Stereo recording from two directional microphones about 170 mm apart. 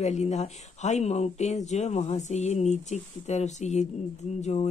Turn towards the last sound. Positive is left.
turn(degrees=40)  # may be behind; listen again after turning